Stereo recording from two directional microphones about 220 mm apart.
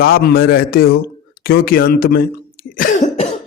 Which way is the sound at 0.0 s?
45° left (ahead or behind).